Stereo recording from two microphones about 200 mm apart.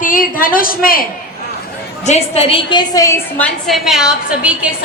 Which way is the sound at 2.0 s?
30° left (ahead or behind).